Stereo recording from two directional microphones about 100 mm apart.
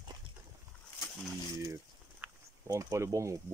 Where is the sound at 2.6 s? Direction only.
30° right (ahead or behind).